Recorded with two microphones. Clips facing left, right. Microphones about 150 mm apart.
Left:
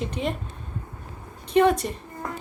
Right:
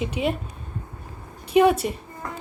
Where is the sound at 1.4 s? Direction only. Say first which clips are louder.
Right 2 dB; 10° right (ahead or behind).